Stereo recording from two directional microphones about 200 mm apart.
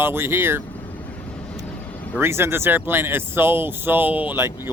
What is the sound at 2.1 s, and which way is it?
Speech, 10° right (ahead or behind).